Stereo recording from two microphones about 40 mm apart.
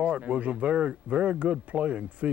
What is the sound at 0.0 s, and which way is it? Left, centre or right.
Speech, right.